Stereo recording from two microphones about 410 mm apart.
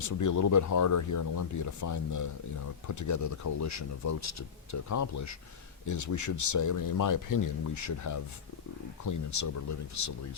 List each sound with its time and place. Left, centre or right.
0.0 s speech: left